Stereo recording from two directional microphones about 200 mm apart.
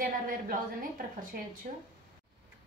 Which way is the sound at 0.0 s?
45° right (ahead or behind).